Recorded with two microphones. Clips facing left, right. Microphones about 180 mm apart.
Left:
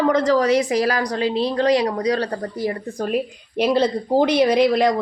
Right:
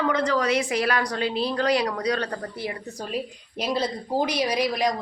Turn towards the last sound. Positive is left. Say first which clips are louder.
# left 8 dB
turn(degrees=60)  # may be behind; listen again after turning